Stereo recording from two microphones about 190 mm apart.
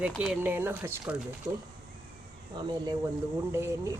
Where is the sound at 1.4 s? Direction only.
15° right (ahead or behind).